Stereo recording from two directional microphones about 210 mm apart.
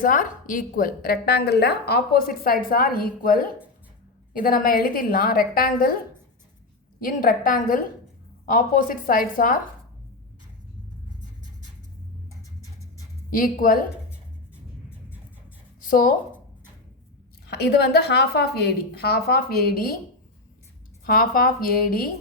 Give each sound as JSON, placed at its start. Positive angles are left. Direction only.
{"t": 0.0, "sound": "a woman's voice", "side_deg": 40}
{"t": 7.0, "sound": "a woman's voice", "side_deg": 40}
{"t": 13.3, "sound": "a woman's voice", "side_deg": 40}
{"t": 15.8, "sound": "a woman's voice", "side_deg": 40}
{"t": 17.4, "sound": "a woman's voice", "side_deg": 50}
{"t": 21.0, "sound": "a woman's voice", "side_deg": 45}